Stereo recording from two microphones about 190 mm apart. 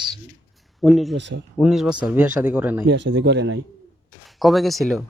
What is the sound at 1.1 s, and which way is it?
Speech, 65° right (ahead or behind).